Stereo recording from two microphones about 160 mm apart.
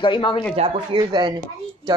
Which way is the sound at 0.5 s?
40° right (ahead or behind).